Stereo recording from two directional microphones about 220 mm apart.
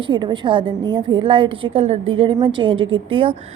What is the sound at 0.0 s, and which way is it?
A woman's voice, 20° right (ahead or behind).